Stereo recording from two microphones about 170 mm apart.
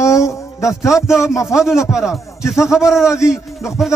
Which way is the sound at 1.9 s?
5° right (ahead or behind).